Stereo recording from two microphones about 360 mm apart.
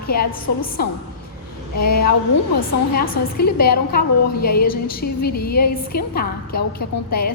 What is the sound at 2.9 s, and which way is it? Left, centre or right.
A woman's voice, left.